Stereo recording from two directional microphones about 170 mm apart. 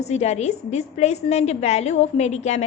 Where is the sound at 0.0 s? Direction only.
40° left (ahead or behind).